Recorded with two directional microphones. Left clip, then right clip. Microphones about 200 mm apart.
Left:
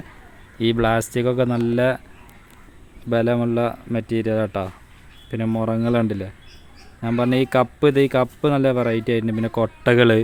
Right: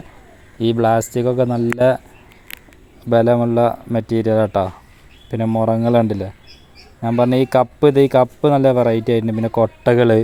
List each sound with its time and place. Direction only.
0.6 s speech: centre (ahead or behind)
3.1 s a man's voice: 10° right (ahead or behind)